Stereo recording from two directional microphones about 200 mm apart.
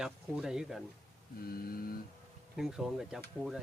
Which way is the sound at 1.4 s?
45° left (ahead or behind).